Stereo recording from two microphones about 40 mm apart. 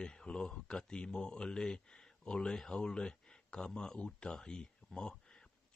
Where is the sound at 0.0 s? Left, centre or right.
Left.